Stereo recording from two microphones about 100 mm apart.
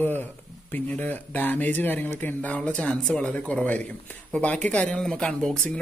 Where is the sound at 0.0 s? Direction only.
20° left (ahead or behind).